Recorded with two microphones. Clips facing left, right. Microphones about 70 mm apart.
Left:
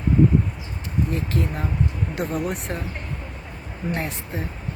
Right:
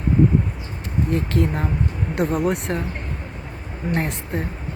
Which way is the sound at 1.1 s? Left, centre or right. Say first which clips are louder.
Right 4 dB; right.